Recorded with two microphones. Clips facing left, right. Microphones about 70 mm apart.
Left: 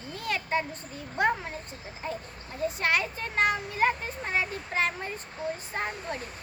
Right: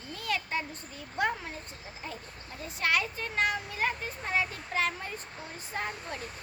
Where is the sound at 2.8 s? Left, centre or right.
Left.